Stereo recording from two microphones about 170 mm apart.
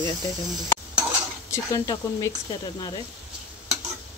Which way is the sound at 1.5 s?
20° left (ahead or behind).